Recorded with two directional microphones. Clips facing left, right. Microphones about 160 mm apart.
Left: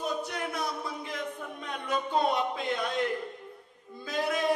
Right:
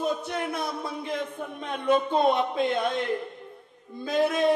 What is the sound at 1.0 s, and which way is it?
Speech, 25° right (ahead or behind).